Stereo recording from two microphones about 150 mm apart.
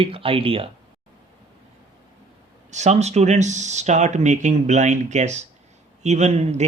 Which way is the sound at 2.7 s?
50° right (ahead or behind).